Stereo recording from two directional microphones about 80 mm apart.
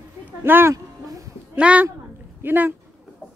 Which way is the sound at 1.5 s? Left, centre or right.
Centre.